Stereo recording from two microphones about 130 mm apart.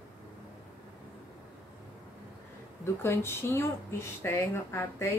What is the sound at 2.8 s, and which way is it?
Speech, 20° left (ahead or behind).